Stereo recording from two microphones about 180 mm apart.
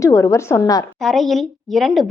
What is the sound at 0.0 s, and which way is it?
Speech, 15° left (ahead or behind).